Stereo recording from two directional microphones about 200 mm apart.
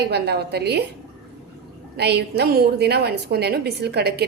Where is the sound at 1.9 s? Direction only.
55° right (ahead or behind).